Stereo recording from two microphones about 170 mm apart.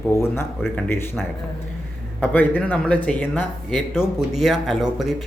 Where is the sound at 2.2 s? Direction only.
10° left (ahead or behind).